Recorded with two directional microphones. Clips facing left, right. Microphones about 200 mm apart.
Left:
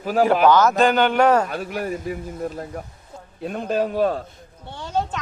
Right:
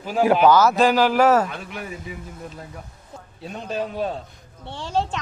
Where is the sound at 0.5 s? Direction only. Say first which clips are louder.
Even; 5° right (ahead or behind).